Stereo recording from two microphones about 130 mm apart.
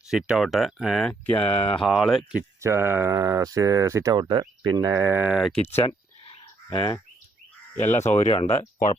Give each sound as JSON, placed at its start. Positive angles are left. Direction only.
{"t": 0.1, "sound": "speech", "side_deg": -5}
{"t": 1.3, "sound": "speech", "side_deg": 10}
{"t": 1.8, "sound": "speech", "side_deg": 0}
{"t": 2.6, "sound": "speech", "side_deg": -20}
{"t": 4.1, "sound": "speech", "side_deg": -35}
{"t": 5.2, "sound": "speech", "side_deg": -5}
{"t": 5.6, "sound": "a sound", "side_deg": 45}
{"t": 6.7, "sound": "speech", "side_deg": 35}
{"t": 7.9, "sound": "speech", "side_deg": 60}